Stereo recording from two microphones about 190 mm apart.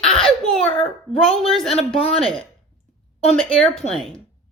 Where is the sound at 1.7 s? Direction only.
30° left (ahead or behind).